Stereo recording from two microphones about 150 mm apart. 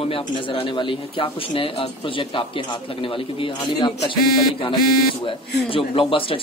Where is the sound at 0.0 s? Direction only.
40° left (ahead or behind).